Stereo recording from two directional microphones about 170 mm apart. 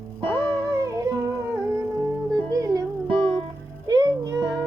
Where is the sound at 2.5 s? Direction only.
20° right (ahead or behind).